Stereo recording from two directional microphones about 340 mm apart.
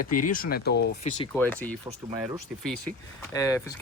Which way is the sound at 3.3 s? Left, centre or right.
Centre.